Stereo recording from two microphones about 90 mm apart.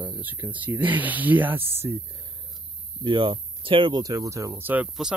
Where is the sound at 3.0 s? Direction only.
70° right (ahead or behind).